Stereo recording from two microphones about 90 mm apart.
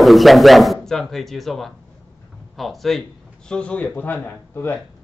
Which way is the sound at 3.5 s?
10° left (ahead or behind).